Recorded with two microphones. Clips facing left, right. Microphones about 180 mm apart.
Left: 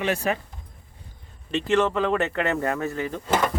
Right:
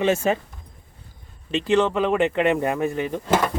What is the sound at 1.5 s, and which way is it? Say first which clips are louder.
Speech: right 2 dB; 15° right (ahead or behind).